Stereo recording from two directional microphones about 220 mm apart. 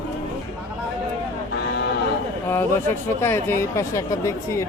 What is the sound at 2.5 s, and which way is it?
Speech, 10° left (ahead or behind).